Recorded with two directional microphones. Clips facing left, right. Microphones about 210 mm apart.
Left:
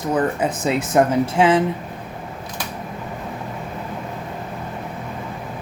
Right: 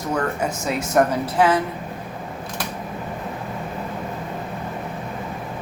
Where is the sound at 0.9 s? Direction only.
25° left (ahead or behind).